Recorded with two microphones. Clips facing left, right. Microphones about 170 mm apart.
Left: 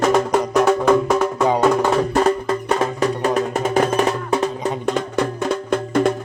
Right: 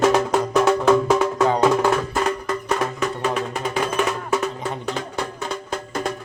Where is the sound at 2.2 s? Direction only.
30° left (ahead or behind).